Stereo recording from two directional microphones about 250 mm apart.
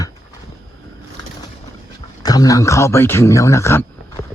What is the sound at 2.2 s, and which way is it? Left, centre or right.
A man's voice, centre.